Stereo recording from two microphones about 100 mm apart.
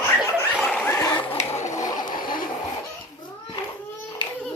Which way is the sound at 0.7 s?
20° left (ahead or behind).